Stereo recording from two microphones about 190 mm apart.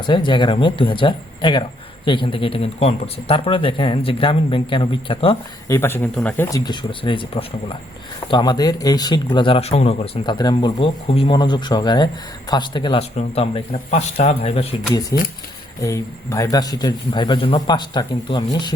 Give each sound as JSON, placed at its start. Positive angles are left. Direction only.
{"t": 0.0, "sound": "speech", "side_deg": 25}
{"t": 5.7, "sound": "speech", "side_deg": 10}
{"t": 6.7, "sound": "speech", "side_deg": 25}
{"t": 15.1, "sound": "speech", "side_deg": 15}